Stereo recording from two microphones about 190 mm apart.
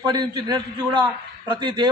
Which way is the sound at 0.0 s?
20° right (ahead or behind).